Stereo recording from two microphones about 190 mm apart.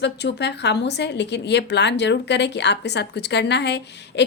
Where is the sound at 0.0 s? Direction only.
65° left (ahead or behind).